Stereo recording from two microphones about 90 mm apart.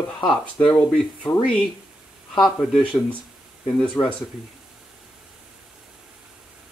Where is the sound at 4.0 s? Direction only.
40° left (ahead or behind).